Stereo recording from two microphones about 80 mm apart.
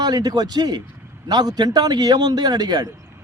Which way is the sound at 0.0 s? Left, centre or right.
Right.